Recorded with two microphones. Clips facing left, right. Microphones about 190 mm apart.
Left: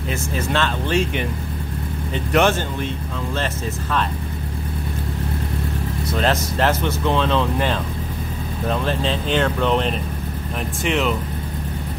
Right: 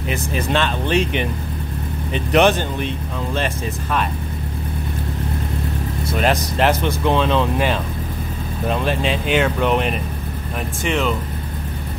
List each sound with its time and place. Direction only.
0.1 s speech: 15° right (ahead or behind)
6.0 s speech: 15° right (ahead or behind)
10.8 s speech: centre (ahead or behind)